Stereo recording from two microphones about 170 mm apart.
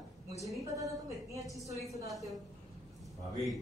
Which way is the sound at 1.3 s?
20° right (ahead or behind).